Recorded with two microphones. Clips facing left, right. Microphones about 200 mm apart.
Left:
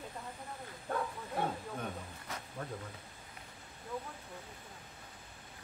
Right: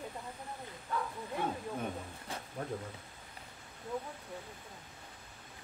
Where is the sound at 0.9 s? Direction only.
50° left (ahead or behind).